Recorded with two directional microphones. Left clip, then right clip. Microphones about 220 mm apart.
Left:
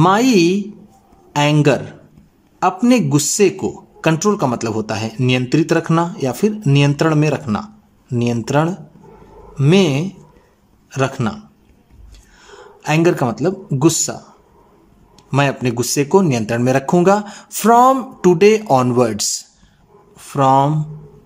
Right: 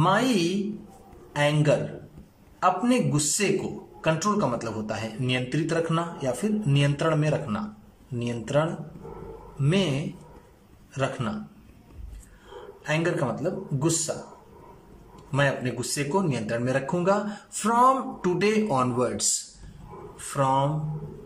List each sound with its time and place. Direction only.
0.0 s speech: 50° left (ahead or behind)
12.8 s speech: 50° left (ahead or behind)
15.3 s speech: 50° left (ahead or behind)
20.2 s speech: 50° left (ahead or behind)